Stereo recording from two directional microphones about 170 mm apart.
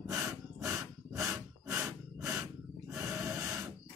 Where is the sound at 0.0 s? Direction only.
20° right (ahead or behind).